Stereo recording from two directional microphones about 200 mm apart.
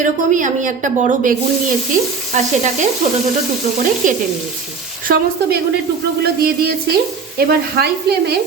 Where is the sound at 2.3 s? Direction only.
35° right (ahead or behind).